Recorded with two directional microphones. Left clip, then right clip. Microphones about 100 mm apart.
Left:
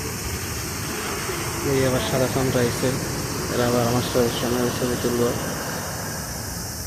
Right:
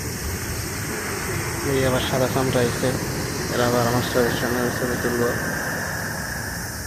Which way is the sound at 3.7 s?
35° left (ahead or behind).